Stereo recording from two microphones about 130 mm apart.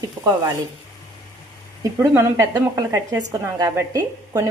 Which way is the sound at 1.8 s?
20° right (ahead or behind).